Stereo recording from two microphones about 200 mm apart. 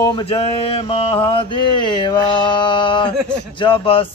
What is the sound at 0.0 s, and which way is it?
Mantra, 30° left (ahead or behind).